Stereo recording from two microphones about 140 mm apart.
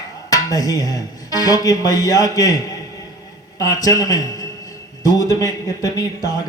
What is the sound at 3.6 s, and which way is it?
A man's voice, 25° left (ahead or behind).